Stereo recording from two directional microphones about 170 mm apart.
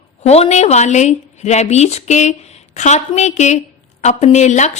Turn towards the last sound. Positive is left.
turn(degrees=45)  # may be behind; listen again after turning